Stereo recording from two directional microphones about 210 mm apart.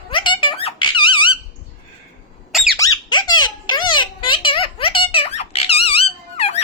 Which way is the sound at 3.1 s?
20° left (ahead or behind).